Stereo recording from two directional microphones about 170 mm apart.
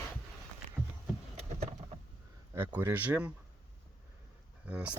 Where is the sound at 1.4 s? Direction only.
40° right (ahead or behind).